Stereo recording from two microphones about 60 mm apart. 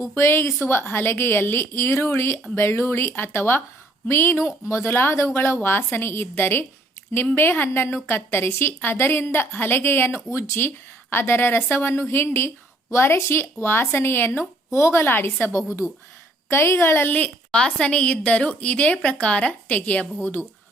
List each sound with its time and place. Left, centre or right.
0.2 s a woman's voice: left
10.2 s a woman's voice: left
14.7 s speech: left
15.0 s speech: left
17.1 s a woman's voice: left